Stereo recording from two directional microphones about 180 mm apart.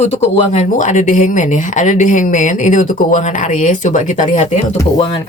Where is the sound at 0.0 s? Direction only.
35° left (ahead or behind).